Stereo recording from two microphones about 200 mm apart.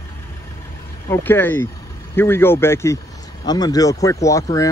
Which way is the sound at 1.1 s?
10° left (ahead or behind).